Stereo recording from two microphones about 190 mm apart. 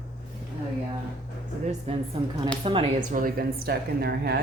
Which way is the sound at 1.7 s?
30° right (ahead or behind).